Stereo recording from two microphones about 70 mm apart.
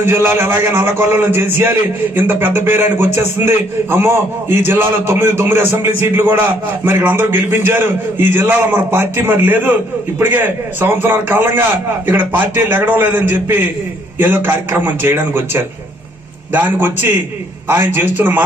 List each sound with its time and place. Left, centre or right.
0.0 s a man's voice: right